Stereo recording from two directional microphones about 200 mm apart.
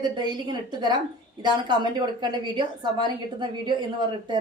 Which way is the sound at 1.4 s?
20° right (ahead or behind).